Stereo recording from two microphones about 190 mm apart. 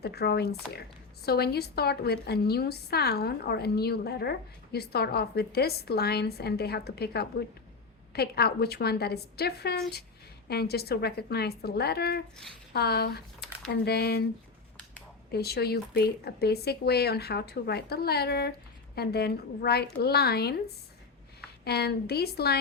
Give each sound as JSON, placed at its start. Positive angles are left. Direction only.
{"t": 0.0, "sound": "speech", "side_deg": 55}
{"t": 13.4, "sound": "typing", "side_deg": 0}
{"t": 13.8, "sound": "speech", "side_deg": 55}
{"t": 15.3, "sound": "speech", "side_deg": 55}
{"t": 21.6, "sound": "speech", "side_deg": 55}